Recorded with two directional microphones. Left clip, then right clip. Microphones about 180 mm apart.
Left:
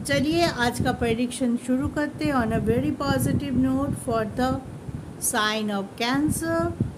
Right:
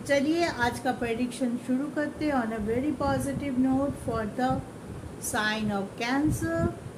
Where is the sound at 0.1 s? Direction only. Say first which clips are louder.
Left 3 dB; 55° left (ahead or behind).